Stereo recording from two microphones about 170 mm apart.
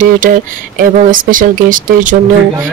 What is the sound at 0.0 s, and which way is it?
A woman's voice, 50° right (ahead or behind).